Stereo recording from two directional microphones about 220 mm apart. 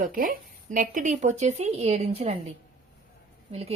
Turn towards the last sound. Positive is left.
turn(degrees=-25)  # may be behind; listen again after turning